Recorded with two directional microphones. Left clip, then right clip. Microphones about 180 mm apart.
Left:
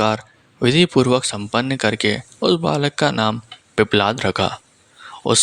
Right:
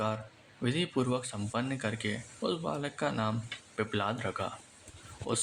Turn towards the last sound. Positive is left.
turn(degrees=50)  # may be behind; listen again after turning